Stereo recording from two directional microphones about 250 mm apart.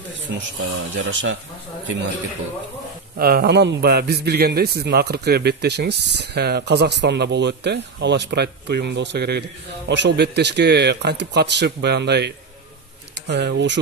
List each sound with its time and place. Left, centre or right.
0.7 s speech: right
3.2 s a man's voice: right